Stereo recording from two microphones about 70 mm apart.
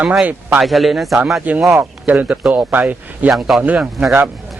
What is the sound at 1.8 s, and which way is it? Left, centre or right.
Speech, right.